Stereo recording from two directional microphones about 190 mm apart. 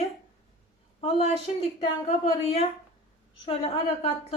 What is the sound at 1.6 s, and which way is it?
A woman's voice, 30° left (ahead or behind).